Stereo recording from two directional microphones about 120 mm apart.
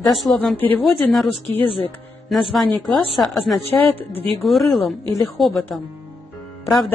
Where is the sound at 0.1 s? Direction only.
Centre (ahead or behind).